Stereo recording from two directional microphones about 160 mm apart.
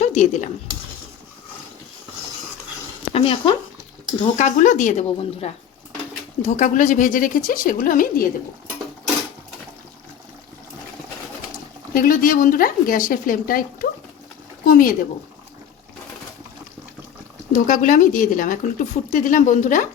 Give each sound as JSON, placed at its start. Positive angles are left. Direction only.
{"t": 0.0, "sound": "cutlery", "side_deg": 50}
{"t": 3.1, "sound": "speech", "side_deg": 35}
{"t": 4.4, "sound": "speech", "side_deg": 50}
{"t": 6.4, "sound": "speech", "side_deg": 55}
{"t": 11.9, "sound": "speech", "side_deg": 60}
{"t": 14.6, "sound": "a sound", "side_deg": 60}
{"t": 17.5, "sound": "speech", "side_deg": 55}